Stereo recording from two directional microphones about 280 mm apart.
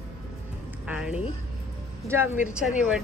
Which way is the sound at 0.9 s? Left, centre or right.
Centre.